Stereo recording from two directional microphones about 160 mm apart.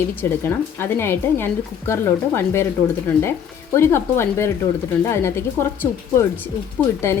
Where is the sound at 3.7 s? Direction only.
15° left (ahead or behind).